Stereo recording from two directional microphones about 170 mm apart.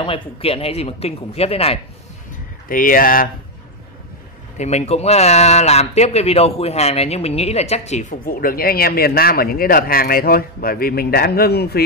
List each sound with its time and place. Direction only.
0.0 s speech: 35° left (ahead or behind)
2.7 s speech: 55° left (ahead or behind)
4.6 s a man's voice: 40° left (ahead or behind); by 11.8 s 65° left (ahead or behind)